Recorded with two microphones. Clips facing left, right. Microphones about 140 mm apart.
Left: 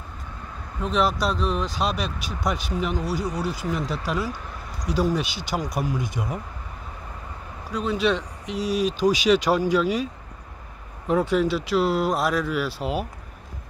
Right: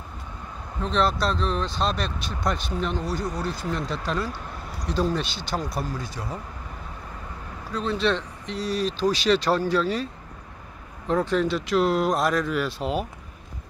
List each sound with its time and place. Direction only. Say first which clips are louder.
0.7 s speech: left 1 dB; 10° left (ahead or behind)
7.7 s speech: left 1 dB; 10° left (ahead or behind)
11.1 s speech: left 2 dB; 10° left (ahead or behind)